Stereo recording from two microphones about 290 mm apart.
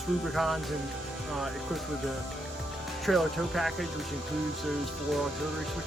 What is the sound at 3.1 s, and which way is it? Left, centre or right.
Speech, centre.